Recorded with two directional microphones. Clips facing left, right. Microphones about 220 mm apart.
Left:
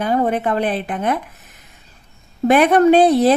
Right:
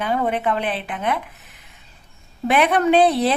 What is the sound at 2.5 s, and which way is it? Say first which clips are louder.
Speech: left 6 dB; 45° left (ahead or behind).